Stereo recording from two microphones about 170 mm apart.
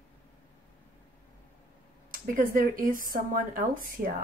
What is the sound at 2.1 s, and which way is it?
A woman's voice, 55° right (ahead or behind).